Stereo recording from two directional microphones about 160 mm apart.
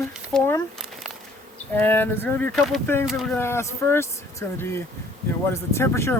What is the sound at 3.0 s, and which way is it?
Speech, centre (ahead or behind).